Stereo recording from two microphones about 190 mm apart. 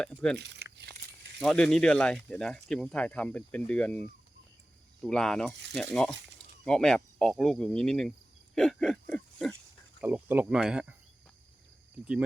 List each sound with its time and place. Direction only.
0.0 s speech: 5° left (ahead or behind)
0.3 s crumpling: 60° right (ahead or behind)
1.4 s speech: 5° left (ahead or behind)
5.0 s speech: 5° left (ahead or behind)
8.5 s pig: 5° left (ahead or behind)
10.0 s speech: 10° right (ahead or behind)